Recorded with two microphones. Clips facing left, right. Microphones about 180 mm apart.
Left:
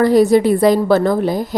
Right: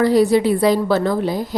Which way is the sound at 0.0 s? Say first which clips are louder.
Left 3 dB; 50° left (ahead or behind).